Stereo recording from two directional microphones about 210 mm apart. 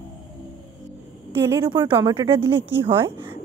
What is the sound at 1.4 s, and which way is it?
A woman's voice, 15° right (ahead or behind).